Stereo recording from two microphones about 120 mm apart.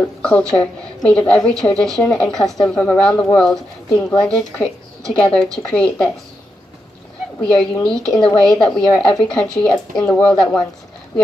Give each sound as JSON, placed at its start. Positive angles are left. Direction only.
{"t": 0.2, "sound": "a woman's voice", "side_deg": 10}
{"t": 3.9, "sound": "speech", "side_deg": 35}
{"t": 4.3, "sound": "a woman's voice", "side_deg": 5}
{"t": 7.4, "sound": "a woman's voice", "side_deg": 10}